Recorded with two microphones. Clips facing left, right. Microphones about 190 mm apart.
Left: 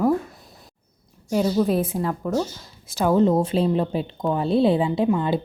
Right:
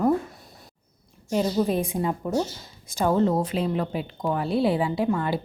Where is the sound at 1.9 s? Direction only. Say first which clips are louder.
Left 1 dB; 15° right (ahead or behind).